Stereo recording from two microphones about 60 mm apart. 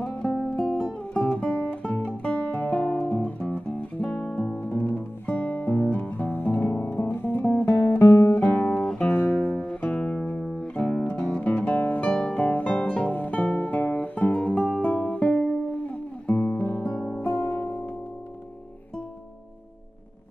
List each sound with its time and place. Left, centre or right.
0.0 s music: left
4.0 s music: centre
4.6 s music: left
8.0 s guitar: left
8.3 s music: left
16.3 s guitar: left